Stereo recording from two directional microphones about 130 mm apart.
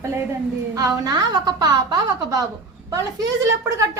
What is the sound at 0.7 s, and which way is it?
A woman's voice, 30° right (ahead or behind).